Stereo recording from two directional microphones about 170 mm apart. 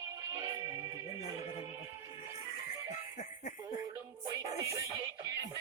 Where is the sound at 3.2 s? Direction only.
45° left (ahead or behind).